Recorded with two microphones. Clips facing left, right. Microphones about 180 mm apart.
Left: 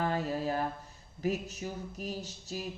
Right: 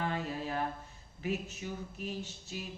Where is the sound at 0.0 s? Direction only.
40° left (ahead or behind).